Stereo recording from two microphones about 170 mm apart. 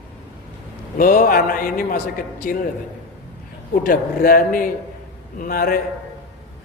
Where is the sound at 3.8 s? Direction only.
55° left (ahead or behind).